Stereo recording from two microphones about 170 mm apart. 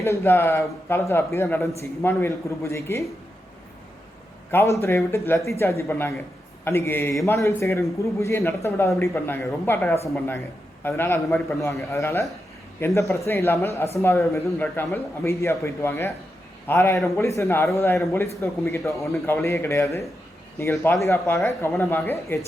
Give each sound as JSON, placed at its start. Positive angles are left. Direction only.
{"t": 0.0, "sound": "a man's voice", "side_deg": 15}
{"t": 4.5, "sound": "a man's voice", "side_deg": 15}
{"t": 18.9, "sound": "a man's voice", "side_deg": 0}
{"t": 19.2, "sound": "a man's voice", "side_deg": 15}